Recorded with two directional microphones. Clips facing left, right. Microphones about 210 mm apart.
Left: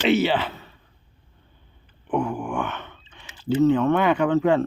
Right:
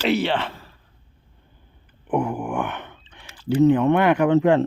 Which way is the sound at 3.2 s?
25° left (ahead or behind).